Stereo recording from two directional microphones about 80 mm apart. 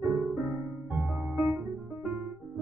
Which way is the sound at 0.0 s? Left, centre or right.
Centre.